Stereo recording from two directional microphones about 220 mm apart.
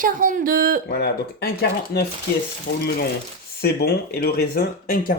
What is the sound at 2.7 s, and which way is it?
Frying, 55° left (ahead or behind).